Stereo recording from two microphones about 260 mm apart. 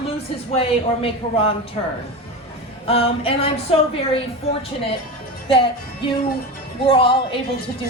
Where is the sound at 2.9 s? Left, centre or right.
Left.